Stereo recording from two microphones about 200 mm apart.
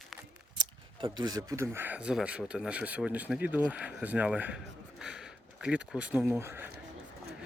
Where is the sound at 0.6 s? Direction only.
20° right (ahead or behind).